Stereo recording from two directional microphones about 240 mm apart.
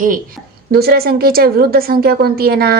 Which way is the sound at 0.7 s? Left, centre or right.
Right.